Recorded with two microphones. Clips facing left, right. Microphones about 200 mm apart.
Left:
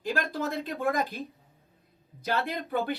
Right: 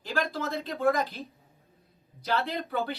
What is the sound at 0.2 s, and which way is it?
Speech, 15° left (ahead or behind).